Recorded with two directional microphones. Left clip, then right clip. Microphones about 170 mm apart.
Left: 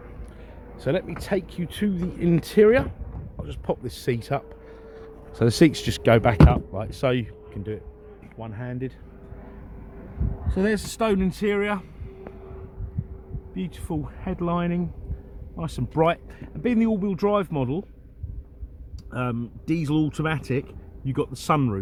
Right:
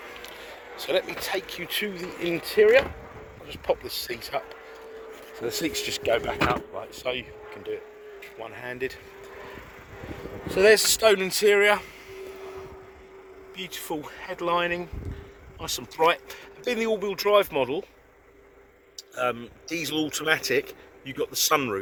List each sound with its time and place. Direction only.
0.8 s speech: 5° left (ahead or behind); by 2.3 s 20° left (ahead or behind)
2.3 s speech: 35° left (ahead or behind)
5.4 s speech: 40° left (ahead or behind)
8.4 s speech: centre (ahead or behind)
10.5 s speech: 10° right (ahead or behind)
13.6 s speech: 10° left (ahead or behind)
19.1 s speech: 5° left (ahead or behind)